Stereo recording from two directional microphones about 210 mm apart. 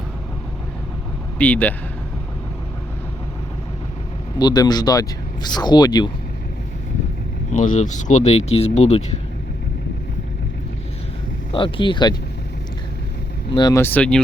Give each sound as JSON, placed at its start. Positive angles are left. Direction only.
{"t": 1.4, "sound": "speech", "side_deg": 5}
{"t": 4.4, "sound": "speech", "side_deg": 20}
{"t": 7.5, "sound": "speech", "side_deg": 35}
{"t": 11.5, "sound": "speech", "side_deg": 25}
{"t": 13.5, "sound": "speech", "side_deg": 20}